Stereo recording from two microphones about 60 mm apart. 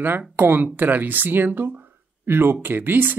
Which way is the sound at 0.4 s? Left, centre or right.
Right.